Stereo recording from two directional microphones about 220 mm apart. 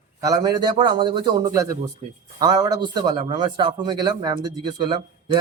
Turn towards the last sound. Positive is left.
turn(degrees=-20)  # may be behind; listen again after turning